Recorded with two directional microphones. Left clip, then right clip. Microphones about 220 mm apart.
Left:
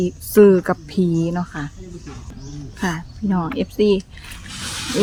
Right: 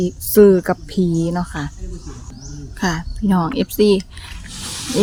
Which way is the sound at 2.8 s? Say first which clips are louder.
Right 3 dB; 20° right (ahead or behind).